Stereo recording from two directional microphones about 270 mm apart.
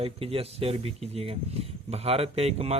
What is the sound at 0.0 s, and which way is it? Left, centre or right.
Speech, right.